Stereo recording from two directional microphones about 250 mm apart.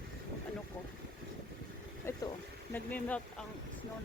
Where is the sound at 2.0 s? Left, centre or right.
Centre.